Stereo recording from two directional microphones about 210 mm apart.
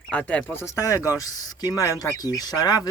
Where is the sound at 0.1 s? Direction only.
5° left (ahead or behind).